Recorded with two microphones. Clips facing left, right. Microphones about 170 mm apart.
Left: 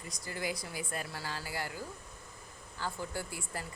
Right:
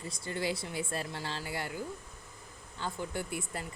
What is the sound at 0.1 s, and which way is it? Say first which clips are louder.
Speech: right 3 dB; 25° right (ahead or behind).